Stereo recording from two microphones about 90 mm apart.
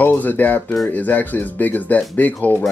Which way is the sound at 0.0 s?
20° left (ahead or behind).